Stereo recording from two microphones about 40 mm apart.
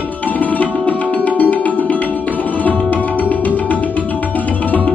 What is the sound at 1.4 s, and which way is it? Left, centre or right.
Tabla, left.